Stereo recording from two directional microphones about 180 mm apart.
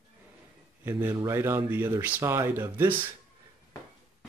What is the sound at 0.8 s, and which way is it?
Speech, 10° right (ahead or behind).